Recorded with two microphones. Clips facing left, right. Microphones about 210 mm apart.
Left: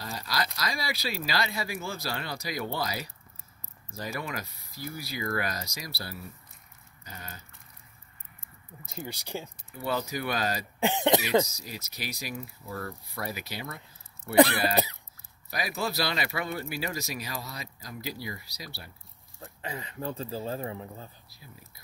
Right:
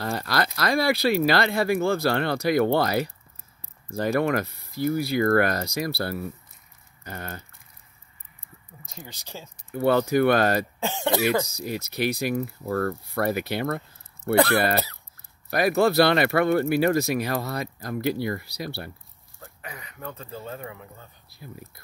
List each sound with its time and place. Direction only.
0.0 s speech: 60° right (ahead or behind)
8.9 s speech: 10° left (ahead or behind)
9.7 s speech: 60° right (ahead or behind)
10.8 s speech: 15° left (ahead or behind)
11.5 s speech: 60° right (ahead or behind)
19.4 s speech: 30° left (ahead or behind)
21.3 s speech: 55° right (ahead or behind)